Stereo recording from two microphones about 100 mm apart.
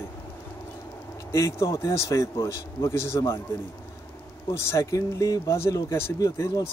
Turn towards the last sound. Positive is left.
turn(degrees=30)  # may be behind; listen again after turning